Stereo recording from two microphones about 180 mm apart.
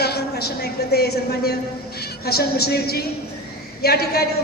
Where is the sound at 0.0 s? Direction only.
65° left (ahead or behind).